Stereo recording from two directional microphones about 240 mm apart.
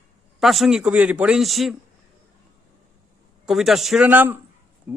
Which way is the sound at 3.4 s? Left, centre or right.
Centre.